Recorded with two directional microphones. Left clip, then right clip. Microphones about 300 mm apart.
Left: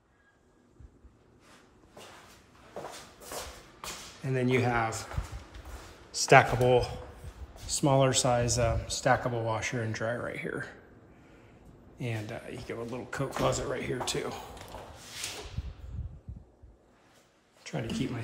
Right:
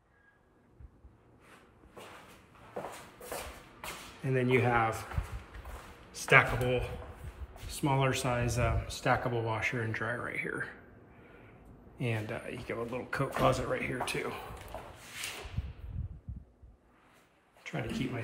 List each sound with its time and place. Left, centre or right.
4.2 s speech: centre
6.1 s speech: centre
12.0 s speech: centre
17.6 s speech: centre